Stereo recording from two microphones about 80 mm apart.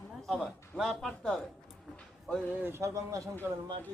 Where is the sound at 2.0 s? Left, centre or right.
Centre.